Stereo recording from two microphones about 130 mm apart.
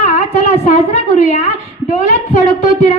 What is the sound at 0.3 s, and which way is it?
Speech, 55° left (ahead or behind).